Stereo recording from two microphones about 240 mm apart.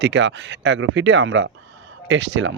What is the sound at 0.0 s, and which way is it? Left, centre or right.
Speech, right.